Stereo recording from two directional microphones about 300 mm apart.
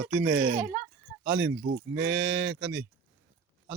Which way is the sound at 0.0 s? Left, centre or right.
Centre.